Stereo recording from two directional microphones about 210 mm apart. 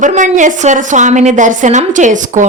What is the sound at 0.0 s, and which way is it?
A woman's voice, 35° right (ahead or behind).